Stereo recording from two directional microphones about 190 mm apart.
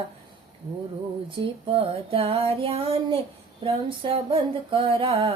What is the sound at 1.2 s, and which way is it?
Female singing, 30° right (ahead or behind).